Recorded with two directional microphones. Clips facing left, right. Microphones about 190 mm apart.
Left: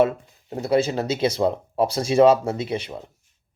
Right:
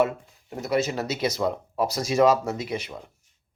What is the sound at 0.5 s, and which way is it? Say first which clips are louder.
Speech: left 4 dB; 30° left (ahead or behind).